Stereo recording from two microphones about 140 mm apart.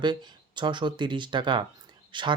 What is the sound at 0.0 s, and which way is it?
Speech, 30° right (ahead or behind).